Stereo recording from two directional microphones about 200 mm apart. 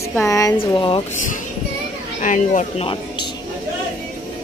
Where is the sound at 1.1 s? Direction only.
40° left (ahead or behind); by 3.3 s 25° left (ahead or behind).